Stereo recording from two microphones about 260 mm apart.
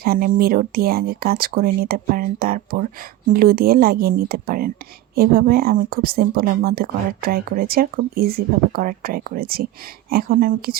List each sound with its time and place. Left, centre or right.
0.0 s speech: right